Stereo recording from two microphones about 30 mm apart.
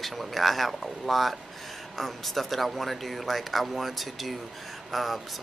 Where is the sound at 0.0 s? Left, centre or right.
Centre.